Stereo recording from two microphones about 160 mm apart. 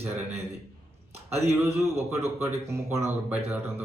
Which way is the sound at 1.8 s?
15° right (ahead or behind).